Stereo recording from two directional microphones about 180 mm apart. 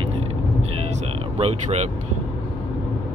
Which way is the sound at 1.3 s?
35° right (ahead or behind).